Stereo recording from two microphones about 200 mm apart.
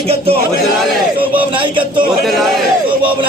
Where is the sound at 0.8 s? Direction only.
5° right (ahead or behind).